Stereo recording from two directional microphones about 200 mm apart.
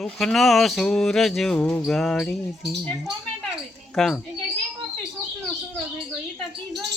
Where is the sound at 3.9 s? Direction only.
5° left (ahead or behind).